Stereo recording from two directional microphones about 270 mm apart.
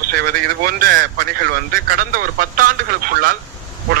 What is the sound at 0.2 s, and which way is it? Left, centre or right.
Speech, right.